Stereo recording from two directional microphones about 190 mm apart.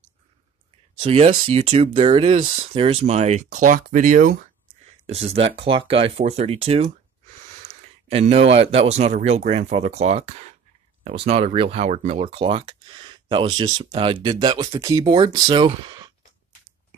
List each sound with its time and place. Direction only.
0.9 s speech: 30° right (ahead or behind)
5.0 s speech: 30° right (ahead or behind)
8.1 s speech: 35° right (ahead or behind)